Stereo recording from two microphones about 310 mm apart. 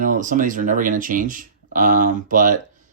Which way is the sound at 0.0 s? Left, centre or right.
Right.